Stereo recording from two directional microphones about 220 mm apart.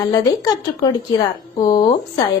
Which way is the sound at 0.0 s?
15° left (ahead or behind).